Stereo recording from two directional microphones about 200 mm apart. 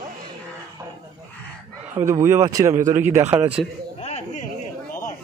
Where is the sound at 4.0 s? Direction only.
30° left (ahead or behind).